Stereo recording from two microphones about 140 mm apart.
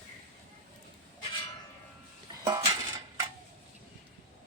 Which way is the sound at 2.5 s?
25° right (ahead or behind).